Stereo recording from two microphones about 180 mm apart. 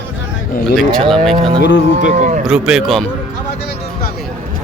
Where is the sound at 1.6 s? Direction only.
80° left.